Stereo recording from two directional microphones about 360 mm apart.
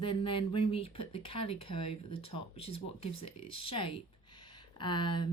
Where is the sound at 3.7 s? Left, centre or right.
Centre.